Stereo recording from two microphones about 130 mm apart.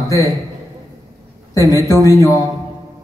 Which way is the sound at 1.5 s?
25° left (ahead or behind).